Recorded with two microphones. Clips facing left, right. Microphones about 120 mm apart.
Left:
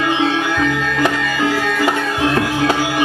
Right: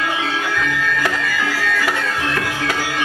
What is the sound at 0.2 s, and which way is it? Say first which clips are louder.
Music: left 6 dB; 20° left (ahead or behind).